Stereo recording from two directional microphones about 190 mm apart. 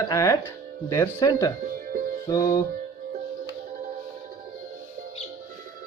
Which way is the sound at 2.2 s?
20° left (ahead or behind).